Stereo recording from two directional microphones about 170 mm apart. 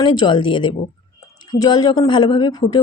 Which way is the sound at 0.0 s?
25° left (ahead or behind).